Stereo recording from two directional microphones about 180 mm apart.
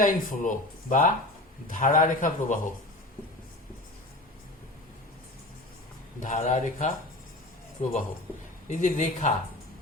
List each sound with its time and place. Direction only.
0.0 s speech: 50° left (ahead or behind)
6.1 s speech: 45° left (ahead or behind)